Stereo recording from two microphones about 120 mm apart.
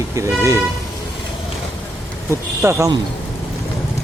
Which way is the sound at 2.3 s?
25° right (ahead or behind).